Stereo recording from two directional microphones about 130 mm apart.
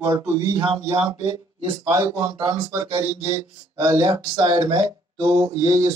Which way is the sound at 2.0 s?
35° right (ahead or behind).